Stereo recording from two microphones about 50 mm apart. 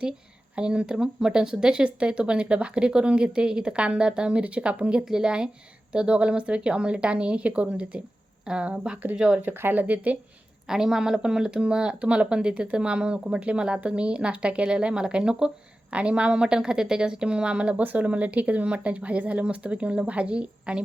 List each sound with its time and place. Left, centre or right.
0.5 s speech: right
9.4 s speech: right
10.7 s speech: centre